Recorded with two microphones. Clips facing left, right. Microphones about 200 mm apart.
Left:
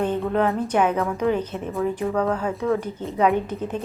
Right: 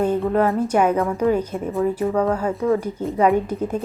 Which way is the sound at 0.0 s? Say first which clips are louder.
Right 3 dB; 5° right (ahead or behind).